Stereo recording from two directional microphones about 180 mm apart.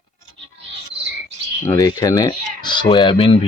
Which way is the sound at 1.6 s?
20° left (ahead or behind).